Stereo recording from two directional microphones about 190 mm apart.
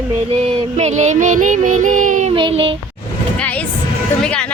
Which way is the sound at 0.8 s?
35° right (ahead or behind).